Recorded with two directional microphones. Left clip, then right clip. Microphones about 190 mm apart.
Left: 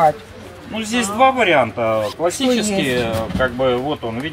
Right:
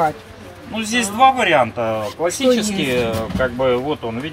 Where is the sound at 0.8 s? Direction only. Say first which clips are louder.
Right 1 dB; 35° right (ahead or behind).